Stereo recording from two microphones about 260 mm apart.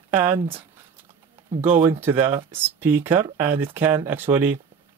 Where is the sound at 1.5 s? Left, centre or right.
Centre.